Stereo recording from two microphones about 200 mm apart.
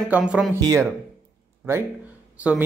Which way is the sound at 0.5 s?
15° right (ahead or behind).